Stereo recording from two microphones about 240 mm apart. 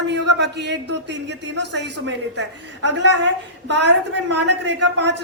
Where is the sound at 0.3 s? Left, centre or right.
Right.